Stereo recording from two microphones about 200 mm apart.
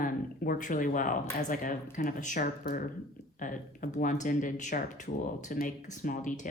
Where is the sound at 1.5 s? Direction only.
40° left (ahead or behind).